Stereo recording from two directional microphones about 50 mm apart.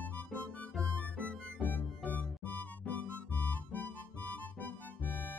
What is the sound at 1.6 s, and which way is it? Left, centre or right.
Music, left.